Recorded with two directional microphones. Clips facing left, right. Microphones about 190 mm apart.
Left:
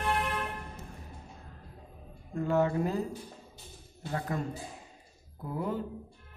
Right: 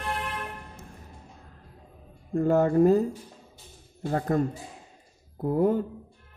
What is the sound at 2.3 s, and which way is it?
Speech, 45° right (ahead or behind).